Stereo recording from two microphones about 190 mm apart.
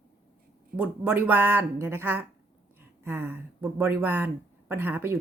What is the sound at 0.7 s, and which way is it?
Speech, 5° right (ahead or behind).